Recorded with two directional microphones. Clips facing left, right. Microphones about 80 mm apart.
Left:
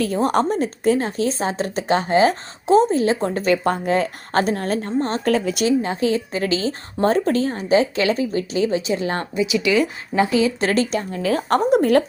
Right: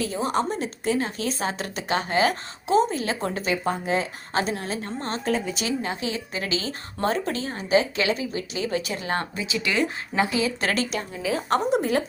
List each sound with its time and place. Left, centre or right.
0.0 s a woman's voice: left
3.3 s speech: left
4.9 s speech: left
5.2 s a woman's voice: left
5.6 s a woman's voice: left
8.7 s speech: left
9.0 s speech: right
10.4 s a woman's voice: left
11.1 s a woman's voice: left